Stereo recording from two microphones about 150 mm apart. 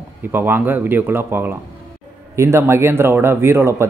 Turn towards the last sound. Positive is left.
turn(degrees=-20)  # may be behind; listen again after turning